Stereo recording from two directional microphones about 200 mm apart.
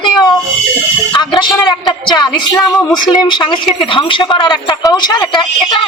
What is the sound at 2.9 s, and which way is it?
Speech, 20° left (ahead or behind).